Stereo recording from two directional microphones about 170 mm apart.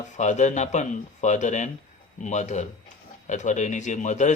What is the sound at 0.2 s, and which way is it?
A man's voice, 45° left (ahead or behind).